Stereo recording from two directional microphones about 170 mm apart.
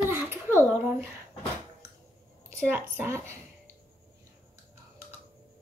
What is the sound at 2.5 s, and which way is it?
Speech, 15° right (ahead or behind).